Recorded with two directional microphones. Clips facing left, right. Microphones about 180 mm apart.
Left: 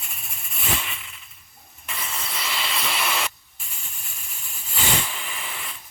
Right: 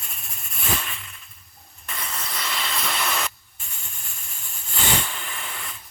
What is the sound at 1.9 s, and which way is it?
Vehicle, centre (ahead or behind).